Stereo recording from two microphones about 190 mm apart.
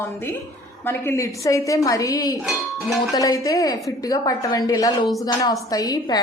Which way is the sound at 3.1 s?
20° left (ahead or behind).